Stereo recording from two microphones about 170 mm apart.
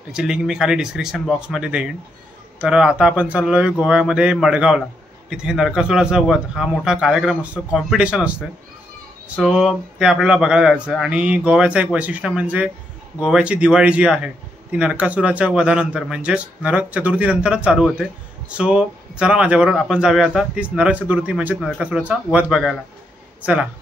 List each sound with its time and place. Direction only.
0.1 s speech: 5° right (ahead or behind)
9.4 s a man's voice: centre (ahead or behind)